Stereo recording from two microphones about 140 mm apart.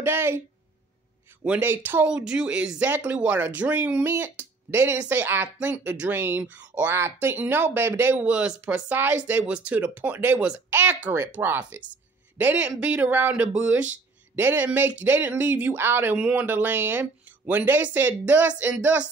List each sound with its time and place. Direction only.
0.0 s speech: 15° right (ahead or behind)
1.4 s speech: 10° right (ahead or behind)